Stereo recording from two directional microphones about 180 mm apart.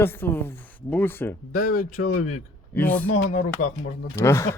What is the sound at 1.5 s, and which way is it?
Speech, 50° left (ahead or behind).